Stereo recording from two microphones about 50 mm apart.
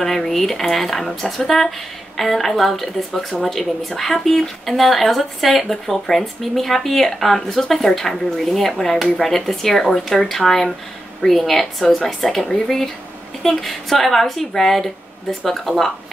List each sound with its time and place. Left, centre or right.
0.0 s speech: centre